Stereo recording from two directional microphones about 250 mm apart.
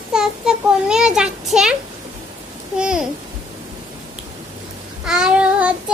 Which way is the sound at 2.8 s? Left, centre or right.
Centre.